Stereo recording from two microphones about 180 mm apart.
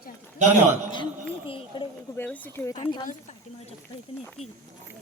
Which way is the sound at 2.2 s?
10° left (ahead or behind).